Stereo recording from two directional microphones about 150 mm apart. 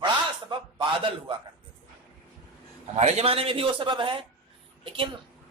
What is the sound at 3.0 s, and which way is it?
A man's voice, 50° right (ahead or behind).